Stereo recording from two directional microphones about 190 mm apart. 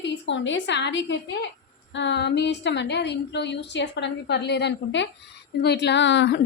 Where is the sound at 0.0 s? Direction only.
70° left (ahead or behind).